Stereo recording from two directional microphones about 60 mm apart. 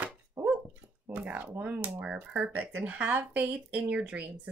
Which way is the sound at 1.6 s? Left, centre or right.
Right.